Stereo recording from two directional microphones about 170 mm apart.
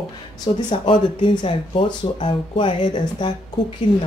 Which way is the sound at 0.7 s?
30° left (ahead or behind).